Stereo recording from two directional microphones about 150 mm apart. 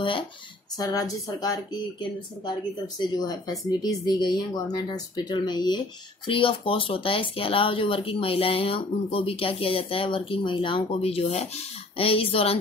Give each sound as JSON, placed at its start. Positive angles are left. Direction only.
{"t": 0.7, "sound": "speech", "side_deg": 25}